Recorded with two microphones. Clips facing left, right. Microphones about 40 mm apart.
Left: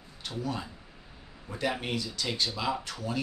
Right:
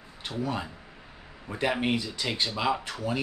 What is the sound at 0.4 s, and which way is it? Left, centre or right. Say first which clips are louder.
Speech: right 3 dB; right.